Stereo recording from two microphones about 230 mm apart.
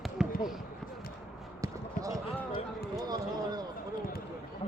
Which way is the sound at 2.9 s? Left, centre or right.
Centre.